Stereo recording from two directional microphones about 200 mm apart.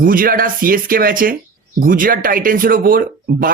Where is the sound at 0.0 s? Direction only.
45° right (ahead or behind).